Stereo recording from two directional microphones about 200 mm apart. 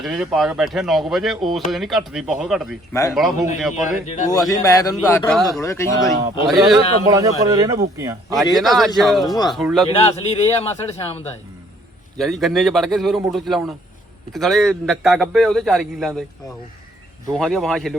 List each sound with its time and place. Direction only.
0.0 s a man's voice: centre (ahead or behind)
2.9 s speech: 15° left (ahead or behind)
3.8 s a man's voice: 35° left (ahead or behind)
4.3 s speech: 20° left (ahead or behind)
6.5 s a man's voice: centre (ahead or behind)
7.1 s speech: 20° right (ahead or behind)
8.5 s a man's voice: centre (ahead or behind)
9.2 s speech: 20° left (ahead or behind)
9.5 s a man's voice: centre (ahead or behind)
10.0 s a man's voice: 30° left (ahead or behind)
12.1 s a man's voice: centre (ahead or behind)
17.3 s a man's voice: centre (ahead or behind)